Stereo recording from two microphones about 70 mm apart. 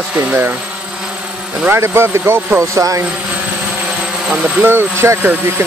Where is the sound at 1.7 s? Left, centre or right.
Right.